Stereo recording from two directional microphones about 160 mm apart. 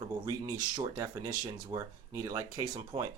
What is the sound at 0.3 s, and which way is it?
Speech, 25° right (ahead or behind).